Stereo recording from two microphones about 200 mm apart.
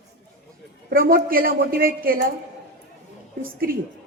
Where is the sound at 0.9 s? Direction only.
45° right (ahead or behind).